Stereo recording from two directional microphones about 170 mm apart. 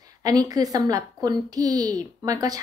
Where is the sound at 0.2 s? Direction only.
20° right (ahead or behind).